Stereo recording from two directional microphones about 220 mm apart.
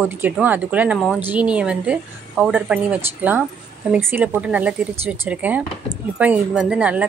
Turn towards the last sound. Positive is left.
turn(degrees=-5)  # may be behind; listen again after turning